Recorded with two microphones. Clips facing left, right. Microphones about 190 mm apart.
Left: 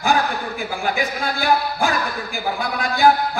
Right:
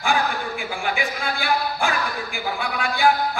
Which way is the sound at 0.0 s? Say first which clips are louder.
Left 3 dB; 40° left (ahead or behind).